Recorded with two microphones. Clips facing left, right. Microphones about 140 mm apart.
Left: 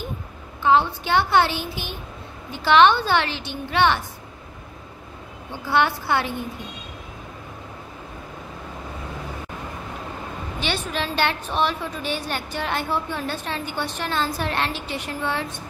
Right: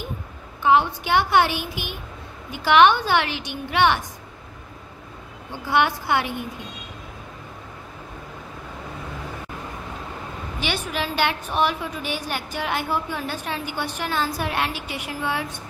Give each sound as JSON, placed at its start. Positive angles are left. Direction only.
{"t": 0.7, "sound": "a woman's voice", "side_deg": -15}
{"t": 5.7, "sound": "a woman's voice", "side_deg": -15}
{"t": 10.6, "sound": "a woman's voice", "side_deg": -10}